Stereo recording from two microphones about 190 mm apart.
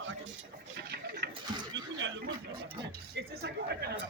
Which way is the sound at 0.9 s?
55° right (ahead or behind).